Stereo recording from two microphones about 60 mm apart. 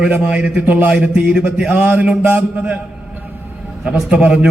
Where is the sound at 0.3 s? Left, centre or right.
Centre.